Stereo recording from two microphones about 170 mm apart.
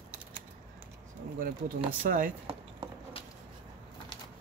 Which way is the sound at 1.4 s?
55° right (ahead or behind).